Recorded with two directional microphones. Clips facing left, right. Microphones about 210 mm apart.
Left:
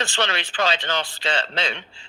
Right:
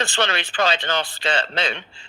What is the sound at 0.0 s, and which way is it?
A man's voice, 55° right (ahead or behind).